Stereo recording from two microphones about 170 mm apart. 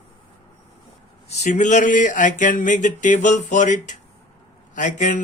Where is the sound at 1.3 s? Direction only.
45° left (ahead or behind).